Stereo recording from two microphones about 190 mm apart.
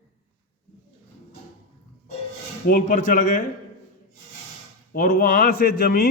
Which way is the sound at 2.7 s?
45° left (ahead or behind).